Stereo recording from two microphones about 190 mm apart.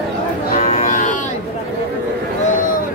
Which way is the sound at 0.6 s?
35° left (ahead or behind).